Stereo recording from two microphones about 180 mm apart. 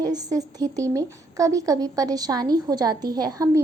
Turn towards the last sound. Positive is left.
turn(degrees=-20)  # may be behind; listen again after turning